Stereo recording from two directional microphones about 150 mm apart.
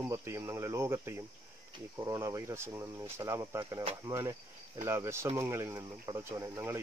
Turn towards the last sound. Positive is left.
turn(degrees=-15)  # may be behind; listen again after turning